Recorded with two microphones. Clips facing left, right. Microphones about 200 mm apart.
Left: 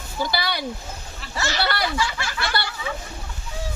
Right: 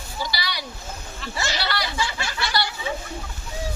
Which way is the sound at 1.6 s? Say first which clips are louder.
Left 6 dB; 50° left (ahead or behind).